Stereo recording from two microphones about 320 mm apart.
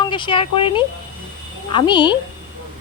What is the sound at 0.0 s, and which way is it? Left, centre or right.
Speech, centre.